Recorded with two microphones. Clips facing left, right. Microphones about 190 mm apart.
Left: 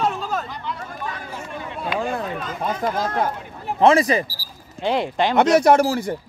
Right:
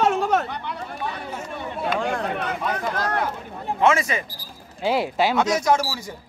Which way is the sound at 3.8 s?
35° left (ahead or behind).